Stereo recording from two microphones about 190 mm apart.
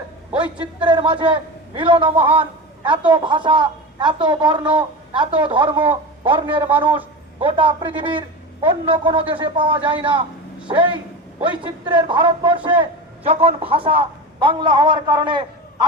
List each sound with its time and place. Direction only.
0.3 s a man's voice: 5° right (ahead or behind)
0.9 s a man's voice: 25° right (ahead or behind)
11.4 s a man's voice: 25° right (ahead or behind)